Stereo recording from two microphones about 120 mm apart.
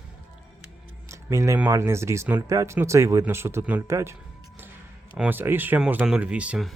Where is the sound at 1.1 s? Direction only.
25° right (ahead or behind).